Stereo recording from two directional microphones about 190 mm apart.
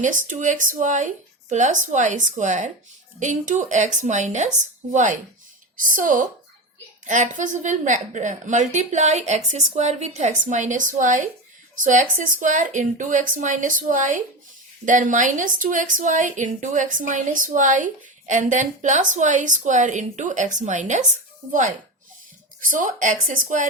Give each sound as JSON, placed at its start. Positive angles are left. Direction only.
{"t": 0.0, "sound": "a woman's voice", "side_deg": -40}